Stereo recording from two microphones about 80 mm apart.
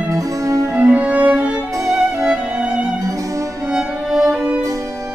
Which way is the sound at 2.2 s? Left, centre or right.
Centre.